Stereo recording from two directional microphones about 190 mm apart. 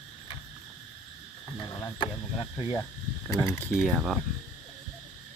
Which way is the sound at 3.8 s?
Centre (ahead or behind).